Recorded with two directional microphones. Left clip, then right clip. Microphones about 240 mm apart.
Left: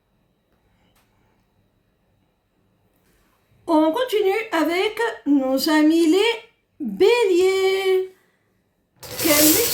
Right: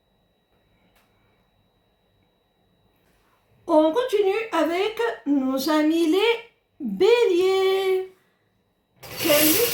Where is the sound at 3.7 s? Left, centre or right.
Left.